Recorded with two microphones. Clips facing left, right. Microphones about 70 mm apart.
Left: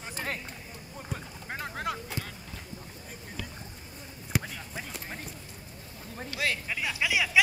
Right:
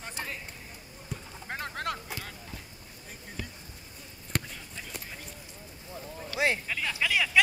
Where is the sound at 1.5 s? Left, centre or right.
Centre.